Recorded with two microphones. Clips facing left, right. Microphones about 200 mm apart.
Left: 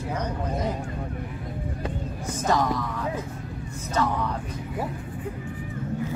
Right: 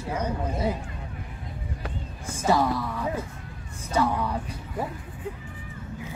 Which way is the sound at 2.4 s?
10° right (ahead or behind).